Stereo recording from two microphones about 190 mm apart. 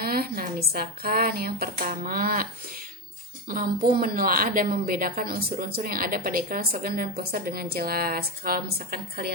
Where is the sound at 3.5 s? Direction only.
50° right (ahead or behind).